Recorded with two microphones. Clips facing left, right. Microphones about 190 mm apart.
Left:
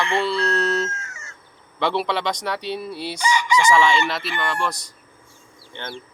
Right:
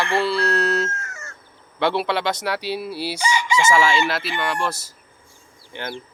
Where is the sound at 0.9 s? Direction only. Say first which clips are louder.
Right 3 dB; 60° right (ahead or behind).